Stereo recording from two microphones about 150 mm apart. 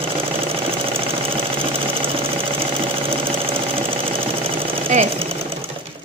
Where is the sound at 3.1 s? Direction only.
40° right (ahead or behind).